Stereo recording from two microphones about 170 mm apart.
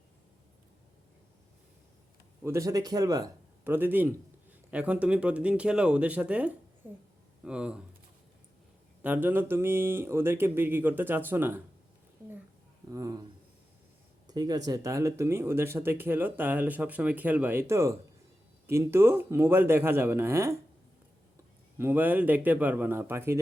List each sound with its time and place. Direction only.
2.4 s a man's voice: 15° right (ahead or behind)
9.0 s speech: 10° right (ahead or behind)
12.9 s speech: 20° right (ahead or behind)
14.3 s speech: 25° right (ahead or behind)
21.8 s speech: 10° right (ahead or behind)